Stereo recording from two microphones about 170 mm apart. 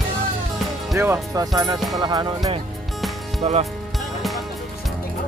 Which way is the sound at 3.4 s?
35° right (ahead or behind).